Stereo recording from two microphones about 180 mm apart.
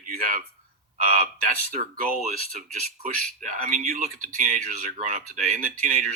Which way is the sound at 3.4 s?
45° right (ahead or behind).